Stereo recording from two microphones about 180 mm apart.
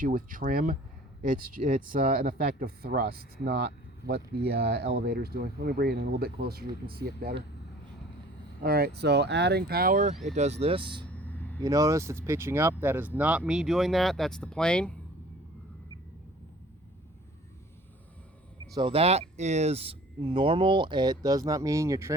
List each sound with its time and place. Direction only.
0.0 s speech: 50° right (ahead or behind)
8.6 s speech: 60° right (ahead or behind); by 11.0 s 25° right (ahead or behind)
11.0 s vehicle: 10° left (ahead or behind)
11.6 s speech: 20° right (ahead or behind); by 14.9 s 5° left (ahead or behind)
18.7 s speech: 25° right (ahead or behind)